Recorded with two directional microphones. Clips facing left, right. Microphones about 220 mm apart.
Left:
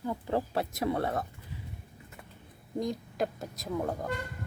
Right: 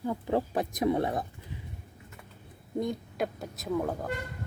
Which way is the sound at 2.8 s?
Centre (ahead or behind).